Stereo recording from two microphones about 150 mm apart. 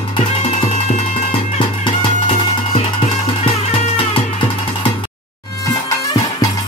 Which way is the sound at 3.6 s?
50° left (ahead or behind).